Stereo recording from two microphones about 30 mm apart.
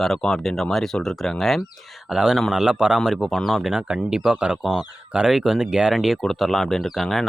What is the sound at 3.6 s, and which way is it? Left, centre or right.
Speech, centre.